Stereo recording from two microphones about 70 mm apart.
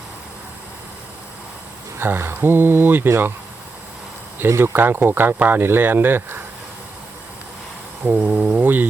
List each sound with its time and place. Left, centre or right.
2.0 s speech: right
4.4 s speech: right
8.0 s insect: centre